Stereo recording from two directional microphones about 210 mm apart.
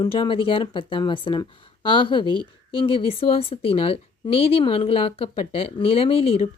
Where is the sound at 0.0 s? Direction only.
25° left (ahead or behind).